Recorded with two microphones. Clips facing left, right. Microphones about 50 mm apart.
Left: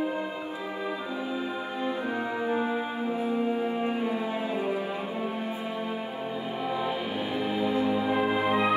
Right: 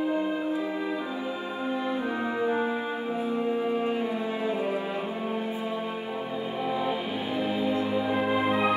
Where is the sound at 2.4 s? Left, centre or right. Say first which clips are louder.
Right 1 dB; centre.